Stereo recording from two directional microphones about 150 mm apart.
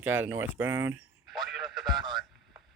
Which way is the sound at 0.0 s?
10° right (ahead or behind).